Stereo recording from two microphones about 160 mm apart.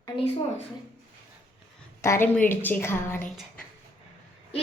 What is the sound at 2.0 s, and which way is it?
A woman's voice, 15° left (ahead or behind).